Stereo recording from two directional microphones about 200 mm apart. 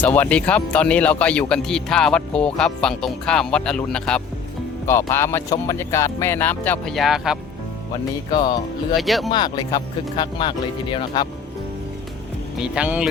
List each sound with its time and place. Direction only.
0.0 s speech: 10° left (ahead or behind)
8.3 s speech: 20° left (ahead or behind)
9.0 s speech: centre (ahead or behind)
9.3 s speech: 20° left (ahead or behind)
12.5 s speech: 5° right (ahead or behind)